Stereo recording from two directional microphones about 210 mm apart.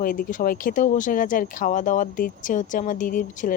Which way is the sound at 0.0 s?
40° left (ahead or behind).